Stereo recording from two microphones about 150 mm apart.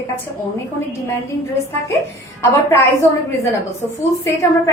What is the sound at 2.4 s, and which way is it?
A woman's voice, 20° left (ahead or behind).